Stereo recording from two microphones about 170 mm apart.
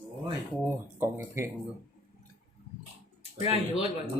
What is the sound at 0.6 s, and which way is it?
Speech, 15° right (ahead or behind).